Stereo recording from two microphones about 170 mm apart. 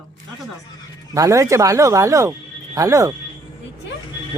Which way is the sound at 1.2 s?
20° right (ahead or behind).